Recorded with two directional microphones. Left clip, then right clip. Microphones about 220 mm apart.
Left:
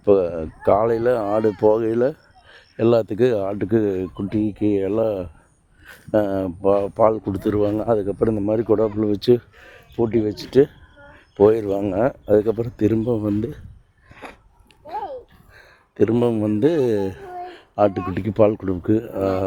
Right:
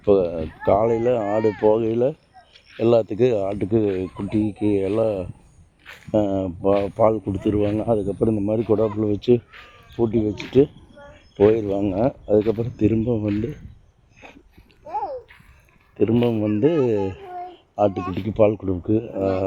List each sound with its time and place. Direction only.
0.0 s speech: 20° left (ahead or behind)
16.0 s speech: 25° left (ahead or behind)
17.4 s a sound: 25° left (ahead or behind)
18.1 s speech: 25° left (ahead or behind)